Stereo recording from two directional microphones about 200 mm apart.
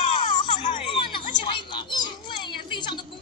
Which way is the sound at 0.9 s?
25° left (ahead or behind).